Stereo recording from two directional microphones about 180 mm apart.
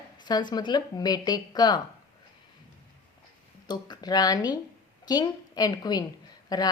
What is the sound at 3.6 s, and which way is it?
A woman's voice, 20° left (ahead or behind).